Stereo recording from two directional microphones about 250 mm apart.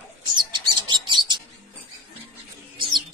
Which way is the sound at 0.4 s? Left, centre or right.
Centre.